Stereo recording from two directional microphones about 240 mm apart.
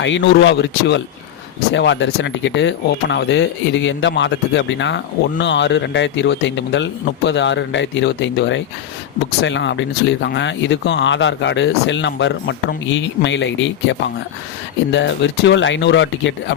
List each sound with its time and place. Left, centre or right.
0.0 s speech: left
1.7 s speech: left
14.9 s speech: left